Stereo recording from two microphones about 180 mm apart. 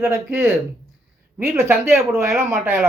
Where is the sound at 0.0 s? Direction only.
15° right (ahead or behind).